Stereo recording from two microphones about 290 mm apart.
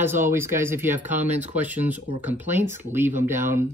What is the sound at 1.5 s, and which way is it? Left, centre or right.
Speech, centre.